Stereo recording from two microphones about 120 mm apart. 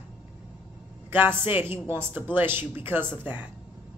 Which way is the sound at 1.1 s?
15° right (ahead or behind).